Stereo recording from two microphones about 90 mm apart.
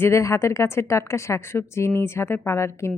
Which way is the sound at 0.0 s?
30° left (ahead or behind).